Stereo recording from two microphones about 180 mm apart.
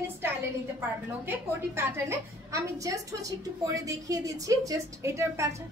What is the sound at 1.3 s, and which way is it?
A woman's voice, 15° right (ahead or behind).